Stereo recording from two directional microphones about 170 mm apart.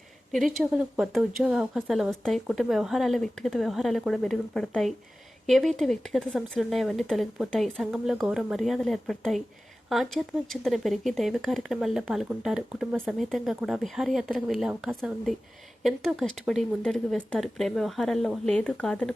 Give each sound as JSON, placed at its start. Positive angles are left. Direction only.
{"t": 0.3, "sound": "speech", "side_deg": 0}